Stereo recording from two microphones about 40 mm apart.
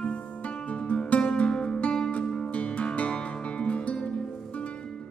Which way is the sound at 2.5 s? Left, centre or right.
Left.